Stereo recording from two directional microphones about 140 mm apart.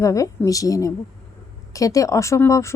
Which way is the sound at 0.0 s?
25° left (ahead or behind).